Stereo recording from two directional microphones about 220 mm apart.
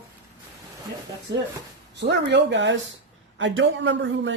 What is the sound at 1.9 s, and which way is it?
Speech, 50° right (ahead or behind).